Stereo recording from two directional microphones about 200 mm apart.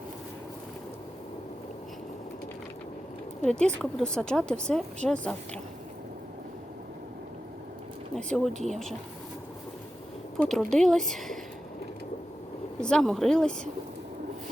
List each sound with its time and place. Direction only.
3.4 s speech: 5° left (ahead or behind)
8.1 s speech: centre (ahead or behind)
10.3 s speech: centre (ahead or behind)
12.8 s speech: 5° left (ahead or behind)